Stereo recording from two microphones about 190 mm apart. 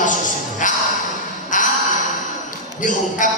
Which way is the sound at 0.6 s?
45° left (ahead or behind).